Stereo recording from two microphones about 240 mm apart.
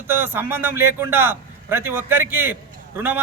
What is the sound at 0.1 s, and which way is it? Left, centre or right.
A man's voice, centre.